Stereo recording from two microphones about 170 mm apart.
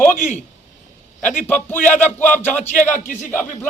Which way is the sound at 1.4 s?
10° left (ahead or behind).